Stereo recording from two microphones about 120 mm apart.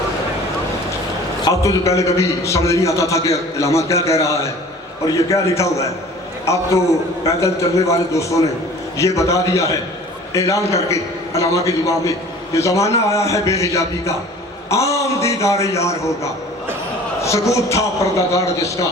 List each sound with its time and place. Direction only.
1.5 s a man's voice: 30° left (ahead or behind)